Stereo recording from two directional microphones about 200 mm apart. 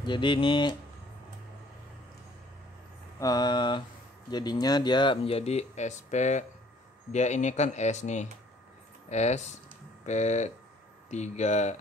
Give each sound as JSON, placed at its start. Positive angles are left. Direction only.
{"t": 0.0, "sound": "speech", "side_deg": 25}
{"t": 3.2, "sound": "speech", "side_deg": 20}